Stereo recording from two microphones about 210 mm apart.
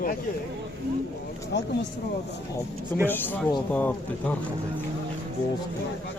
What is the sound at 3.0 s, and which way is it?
Speech, 10° left (ahead or behind).